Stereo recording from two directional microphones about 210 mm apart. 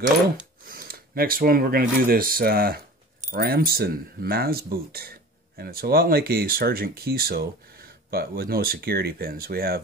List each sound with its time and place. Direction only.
0.7 s speech: 45° right (ahead or behind)